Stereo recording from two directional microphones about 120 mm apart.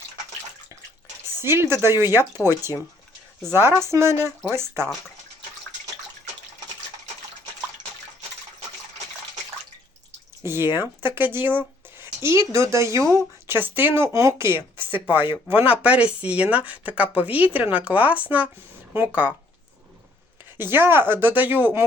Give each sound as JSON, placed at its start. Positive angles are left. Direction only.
{"t": 1.4, "sound": "speech", "side_deg": -20}
{"t": 10.4, "sound": "speech", "side_deg": -20}
{"t": 20.6, "sound": "speech", "side_deg": -20}